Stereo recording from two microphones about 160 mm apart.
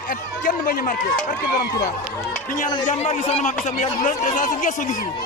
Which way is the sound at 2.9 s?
45° left (ahead or behind).